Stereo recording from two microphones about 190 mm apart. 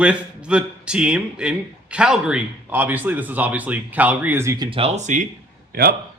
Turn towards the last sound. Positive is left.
turn(degrees=-55)  # may be behind; listen again after turning